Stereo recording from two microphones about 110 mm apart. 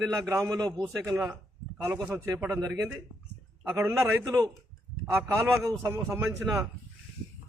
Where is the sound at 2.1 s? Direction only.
30° right (ahead or behind).